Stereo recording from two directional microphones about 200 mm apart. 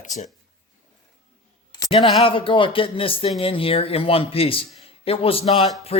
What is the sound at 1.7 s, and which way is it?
Speech, 20° left (ahead or behind).